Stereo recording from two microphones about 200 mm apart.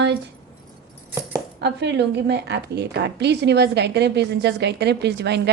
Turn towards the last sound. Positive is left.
turn(degrees=-55)  # may be behind; listen again after turning